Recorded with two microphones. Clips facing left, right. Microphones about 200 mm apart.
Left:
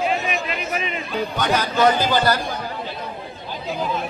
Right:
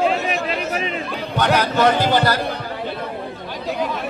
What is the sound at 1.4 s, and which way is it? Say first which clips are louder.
Speech: right 2 dB; 65° right (ahead or behind).